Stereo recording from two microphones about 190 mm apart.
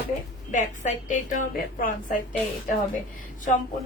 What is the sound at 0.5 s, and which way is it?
Speech, 40° left (ahead or behind).